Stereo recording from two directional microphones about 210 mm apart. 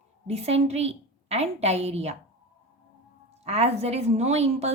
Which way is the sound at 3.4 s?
30° right (ahead or behind).